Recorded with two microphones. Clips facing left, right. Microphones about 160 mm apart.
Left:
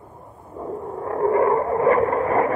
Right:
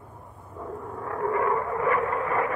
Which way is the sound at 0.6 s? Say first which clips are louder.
Left 6 dB; 30° left (ahead or behind).